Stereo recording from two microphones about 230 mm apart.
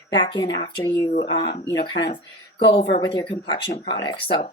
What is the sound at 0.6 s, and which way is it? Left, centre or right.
Speech, left.